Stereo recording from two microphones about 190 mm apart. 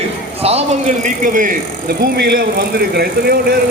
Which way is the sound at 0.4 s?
35° right (ahead or behind).